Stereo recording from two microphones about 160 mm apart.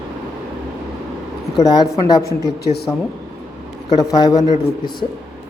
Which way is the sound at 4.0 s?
25° left (ahead or behind).